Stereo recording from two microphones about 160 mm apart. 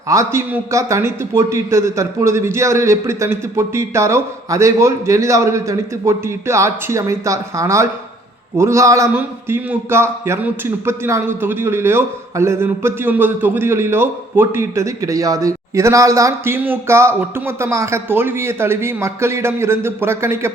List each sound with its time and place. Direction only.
0.1 s a man's voice: 20° right (ahead or behind)